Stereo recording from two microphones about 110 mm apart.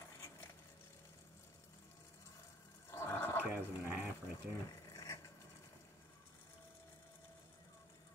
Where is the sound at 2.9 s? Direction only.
25° left (ahead or behind).